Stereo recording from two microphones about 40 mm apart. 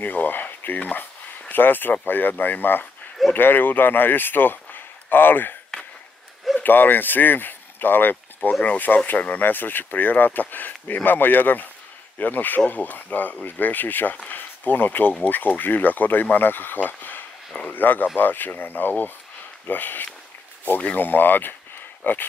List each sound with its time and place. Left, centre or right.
0.0 s speech: left
6.6 s speech: left
8.6 s speech: left
9.5 s speech: left